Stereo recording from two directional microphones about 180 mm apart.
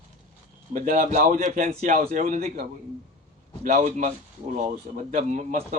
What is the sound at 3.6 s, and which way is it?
A man's voice, 40° right (ahead or behind).